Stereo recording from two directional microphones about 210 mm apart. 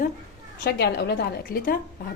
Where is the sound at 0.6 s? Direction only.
50° left (ahead or behind).